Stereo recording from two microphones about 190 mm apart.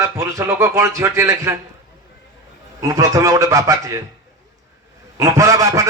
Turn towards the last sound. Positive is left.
turn(degrees=-15)  # may be behind; listen again after turning